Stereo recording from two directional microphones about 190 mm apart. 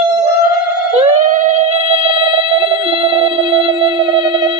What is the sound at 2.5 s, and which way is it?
Telephone bell ringing, 30° right (ahead or behind).